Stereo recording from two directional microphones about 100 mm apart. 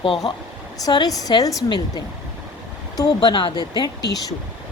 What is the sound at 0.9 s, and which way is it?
Speech, 40° left (ahead or behind).